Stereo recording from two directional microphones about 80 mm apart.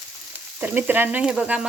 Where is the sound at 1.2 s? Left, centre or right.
Centre.